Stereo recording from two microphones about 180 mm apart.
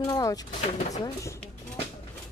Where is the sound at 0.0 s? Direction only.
20° left (ahead or behind).